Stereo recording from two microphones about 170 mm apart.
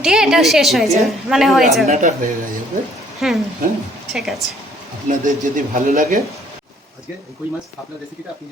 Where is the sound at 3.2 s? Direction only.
Centre (ahead or behind).